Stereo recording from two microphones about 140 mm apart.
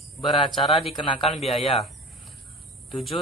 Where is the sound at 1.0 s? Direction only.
35° left (ahead or behind).